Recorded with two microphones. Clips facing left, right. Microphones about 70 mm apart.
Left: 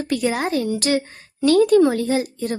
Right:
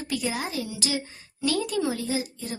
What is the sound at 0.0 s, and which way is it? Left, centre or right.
A woman's voice, left.